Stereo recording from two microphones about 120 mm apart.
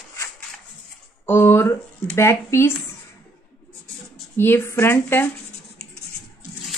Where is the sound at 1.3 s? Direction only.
20° left (ahead or behind).